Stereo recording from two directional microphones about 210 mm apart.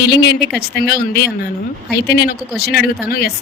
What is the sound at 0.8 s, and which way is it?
Speech, 50° left (ahead or behind).